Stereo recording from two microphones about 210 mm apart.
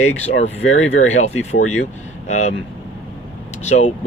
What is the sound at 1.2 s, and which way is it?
Speech, 30° left (ahead or behind).